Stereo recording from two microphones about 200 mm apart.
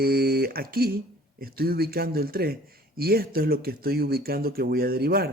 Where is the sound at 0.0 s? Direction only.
50° right (ahead or behind).